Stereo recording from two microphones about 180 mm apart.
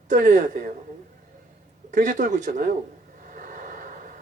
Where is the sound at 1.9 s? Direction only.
45° right (ahead or behind).